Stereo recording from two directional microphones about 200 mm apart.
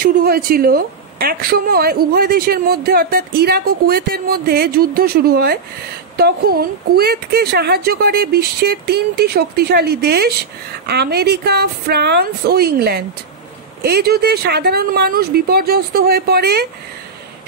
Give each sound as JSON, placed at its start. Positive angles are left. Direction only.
{"t": 0.0, "sound": "a woman's voice", "side_deg": -45}